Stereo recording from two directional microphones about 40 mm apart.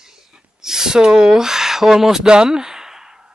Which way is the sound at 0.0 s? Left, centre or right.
Centre.